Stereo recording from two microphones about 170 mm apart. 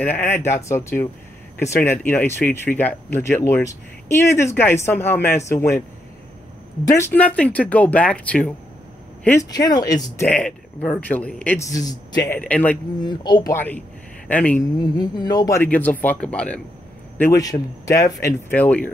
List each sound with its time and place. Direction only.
0.0 s speech: 10° left (ahead or behind)
6.9 s speech: 15° left (ahead or behind)
10.1 s speech: 5° left (ahead or behind)
11.6 s speech: 20° left (ahead or behind)
12.4 s speech: 10° left (ahead or behind)
13.0 s speech: 25° left (ahead or behind); by 14.6 s 10° left (ahead or behind)
14.6 s speech: 25° left (ahead or behind); by 16.6 s 5° left (ahead or behind)
17.2 s speech: 20° left (ahead or behind)
18.2 s speech: 10° left (ahead or behind)